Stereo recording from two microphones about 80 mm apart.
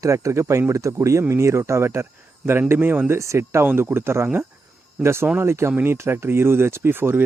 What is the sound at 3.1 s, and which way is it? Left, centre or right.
Speech, right.